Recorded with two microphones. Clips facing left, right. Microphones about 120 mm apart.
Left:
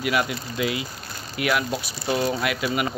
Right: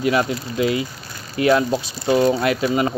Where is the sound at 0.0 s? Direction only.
30° right (ahead or behind).